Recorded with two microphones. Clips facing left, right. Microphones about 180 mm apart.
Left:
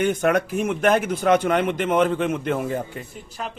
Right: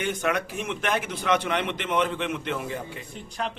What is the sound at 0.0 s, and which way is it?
A man's voice, 50° left (ahead or behind).